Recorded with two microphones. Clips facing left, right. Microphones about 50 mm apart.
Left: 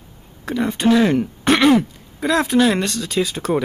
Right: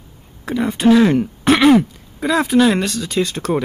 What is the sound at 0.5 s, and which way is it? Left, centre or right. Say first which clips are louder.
Speech: right 3 dB; centre.